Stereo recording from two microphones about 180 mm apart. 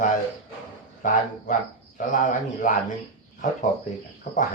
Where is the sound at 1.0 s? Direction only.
45° left (ahead or behind).